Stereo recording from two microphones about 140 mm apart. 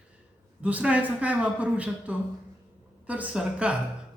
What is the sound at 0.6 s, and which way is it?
Speech, 10° right (ahead or behind).